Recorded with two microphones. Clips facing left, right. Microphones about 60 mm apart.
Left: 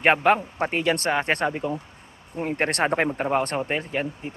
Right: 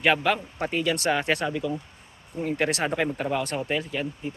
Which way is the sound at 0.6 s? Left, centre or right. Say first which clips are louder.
Left 2 dB; left.